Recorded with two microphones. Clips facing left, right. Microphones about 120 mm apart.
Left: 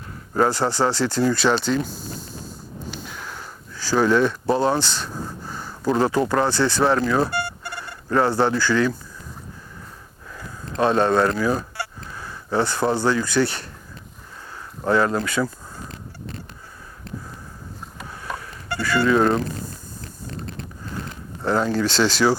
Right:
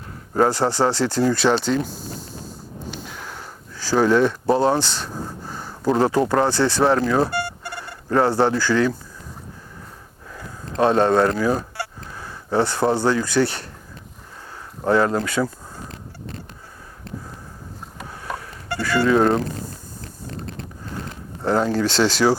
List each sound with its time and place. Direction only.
0.3 s speech: 35° right (ahead or behind)
1.6 s speech: 50° right (ahead or behind)
2.9 s a sound: 45° right (ahead or behind)
3.9 s speech: 40° right (ahead or behind)
4.5 s speech: 50° right (ahead or behind)
5.0 s speech: 30° right (ahead or behind)
8.7 s speech: 45° right (ahead or behind)
10.3 s fowl: 40° right (ahead or behind)
14.8 s a sound: 40° right (ahead or behind)
17.9 s vehicle: 45° right (ahead or behind)
20.2 s a sound: 45° right (ahead or behind)
21.8 s speech: 65° right (ahead or behind)